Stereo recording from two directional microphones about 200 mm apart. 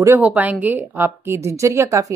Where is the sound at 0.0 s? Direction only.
10° right (ahead or behind).